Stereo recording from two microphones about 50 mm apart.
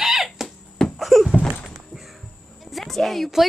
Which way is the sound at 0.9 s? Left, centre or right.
Centre.